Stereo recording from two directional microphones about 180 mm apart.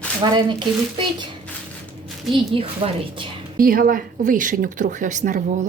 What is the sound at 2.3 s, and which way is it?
Speech, 30° right (ahead or behind).